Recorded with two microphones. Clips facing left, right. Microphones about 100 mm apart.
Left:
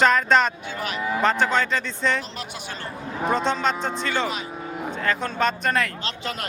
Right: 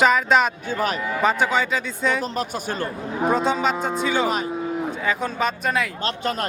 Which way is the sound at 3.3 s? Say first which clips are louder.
Right 1 dB; 5° right (ahead or behind).